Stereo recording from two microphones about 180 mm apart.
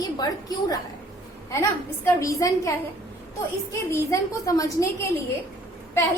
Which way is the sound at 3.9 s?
20° left (ahead or behind).